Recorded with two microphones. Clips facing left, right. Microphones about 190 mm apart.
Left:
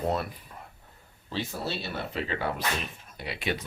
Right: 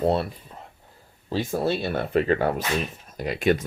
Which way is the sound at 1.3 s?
50° right (ahead or behind).